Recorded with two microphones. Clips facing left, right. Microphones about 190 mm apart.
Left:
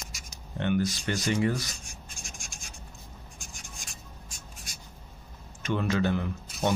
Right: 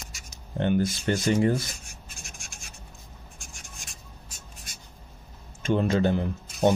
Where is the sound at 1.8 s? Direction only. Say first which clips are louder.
Even; 5° right (ahead or behind).